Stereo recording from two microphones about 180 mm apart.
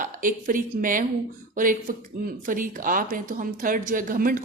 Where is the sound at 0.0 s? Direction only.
50° right (ahead or behind).